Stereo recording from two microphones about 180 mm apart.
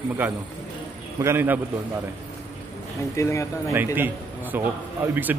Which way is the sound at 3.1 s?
15° left (ahead or behind).